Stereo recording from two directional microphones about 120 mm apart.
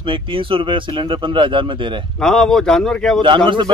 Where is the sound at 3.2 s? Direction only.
45° right (ahead or behind).